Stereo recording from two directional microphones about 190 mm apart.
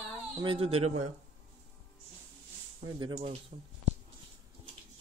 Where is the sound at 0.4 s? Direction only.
30° right (ahead or behind).